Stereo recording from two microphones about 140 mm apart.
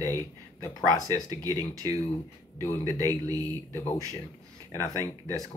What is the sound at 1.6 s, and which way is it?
Speech, 25° right (ahead or behind).